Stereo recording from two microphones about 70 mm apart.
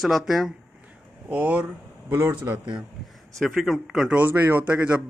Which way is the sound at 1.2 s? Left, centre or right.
Right.